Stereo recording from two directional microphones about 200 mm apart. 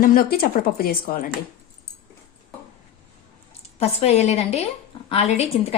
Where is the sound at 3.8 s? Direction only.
30° left (ahead or behind).